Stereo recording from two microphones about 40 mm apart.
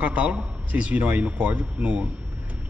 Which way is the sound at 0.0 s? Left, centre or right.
Right.